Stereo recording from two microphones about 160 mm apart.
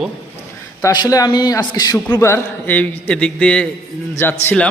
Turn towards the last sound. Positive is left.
turn(degrees=5)  # may be behind; listen again after turning